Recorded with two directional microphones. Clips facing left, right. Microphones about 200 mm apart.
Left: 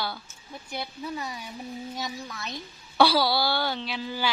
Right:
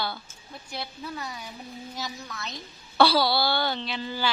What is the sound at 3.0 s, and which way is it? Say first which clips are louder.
A woman's voice: even; 10° left (ahead or behind).